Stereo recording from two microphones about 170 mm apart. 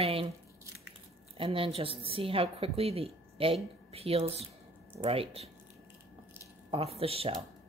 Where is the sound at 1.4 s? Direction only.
30° right (ahead or behind).